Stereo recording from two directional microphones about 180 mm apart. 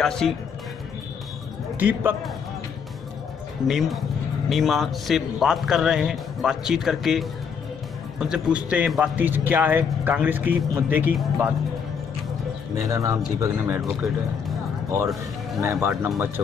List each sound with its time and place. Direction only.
0.0 s a man's voice: centre (ahead or behind)
1.8 s speech: 10° right (ahead or behind)
3.6 s a man's voice: centre (ahead or behind)
12.7 s speech: 20° right (ahead or behind)
15.6 s speech: 15° right (ahead or behind)